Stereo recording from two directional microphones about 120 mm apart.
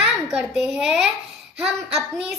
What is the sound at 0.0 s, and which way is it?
A child's voice, 5° right (ahead or behind).